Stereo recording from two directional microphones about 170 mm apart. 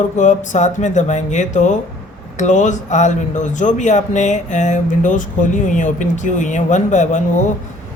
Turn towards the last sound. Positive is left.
turn(degrees=45)  # may be behind; listen again after turning